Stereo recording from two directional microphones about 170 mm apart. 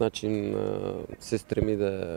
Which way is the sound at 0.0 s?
5° left (ahead or behind).